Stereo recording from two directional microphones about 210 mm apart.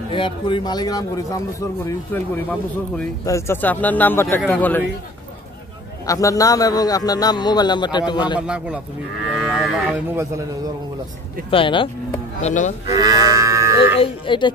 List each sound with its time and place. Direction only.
0.1 s a man's voice: 25° left (ahead or behind); by 4.8 s 10° left (ahead or behind)
6.0 s a man's voice: 15° left (ahead or behind)
8.4 s a man's voice: 5° right (ahead or behind)
9.3 s livestock: centre (ahead or behind)
10.1 s a man's voice: 15° right (ahead or behind)
11.5 s speech: 25° left (ahead or behind)
12.9 s livestock: 15° right (ahead or behind)
13.9 s speech: 25° left (ahead or behind)